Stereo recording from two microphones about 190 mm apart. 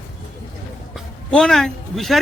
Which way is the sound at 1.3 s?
5° left (ahead or behind).